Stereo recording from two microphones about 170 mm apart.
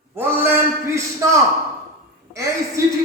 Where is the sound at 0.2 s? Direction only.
15° right (ahead or behind).